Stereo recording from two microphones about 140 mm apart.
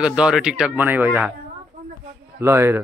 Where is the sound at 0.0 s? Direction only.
5° right (ahead or behind).